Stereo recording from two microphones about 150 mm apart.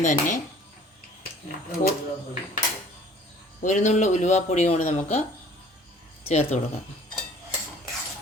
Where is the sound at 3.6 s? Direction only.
55° left (ahead or behind).